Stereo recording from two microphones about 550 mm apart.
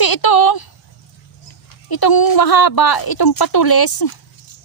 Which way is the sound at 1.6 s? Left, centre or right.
Left.